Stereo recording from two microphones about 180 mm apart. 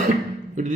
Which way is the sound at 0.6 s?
45° right (ahead or behind).